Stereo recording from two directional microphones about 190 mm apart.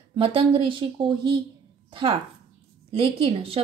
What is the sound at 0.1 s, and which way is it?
A woman's voice, 30° right (ahead or behind).